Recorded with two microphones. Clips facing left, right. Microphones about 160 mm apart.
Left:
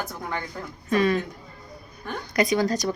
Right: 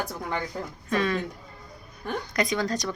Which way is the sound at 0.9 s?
5° left (ahead or behind).